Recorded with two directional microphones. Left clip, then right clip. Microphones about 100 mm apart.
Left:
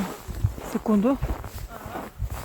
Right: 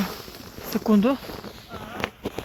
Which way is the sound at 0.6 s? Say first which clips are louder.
Right 2 dB; 5° left (ahead or behind).